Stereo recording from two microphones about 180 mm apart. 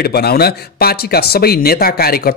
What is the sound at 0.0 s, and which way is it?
Speech, 60° left (ahead or behind).